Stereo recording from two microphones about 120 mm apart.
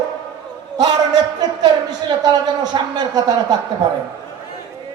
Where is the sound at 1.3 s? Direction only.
35° right (ahead or behind).